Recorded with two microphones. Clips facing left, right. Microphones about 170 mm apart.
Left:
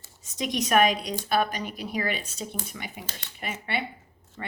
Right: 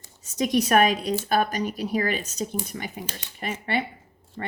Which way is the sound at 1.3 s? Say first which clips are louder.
Even; 45° right (ahead or behind).